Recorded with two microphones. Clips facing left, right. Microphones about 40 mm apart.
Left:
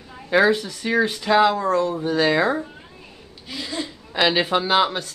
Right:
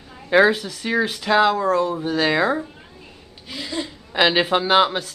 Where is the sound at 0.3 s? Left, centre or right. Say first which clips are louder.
Right 2 dB; centre.